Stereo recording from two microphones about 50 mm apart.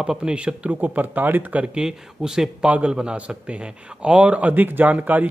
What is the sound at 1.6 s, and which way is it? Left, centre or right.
Speech, centre.